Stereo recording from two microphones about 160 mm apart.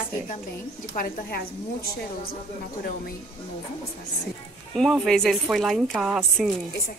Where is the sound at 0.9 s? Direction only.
70° left (ahead or behind).